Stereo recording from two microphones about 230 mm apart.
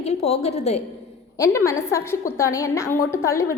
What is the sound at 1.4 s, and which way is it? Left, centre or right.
A woman's voice, centre.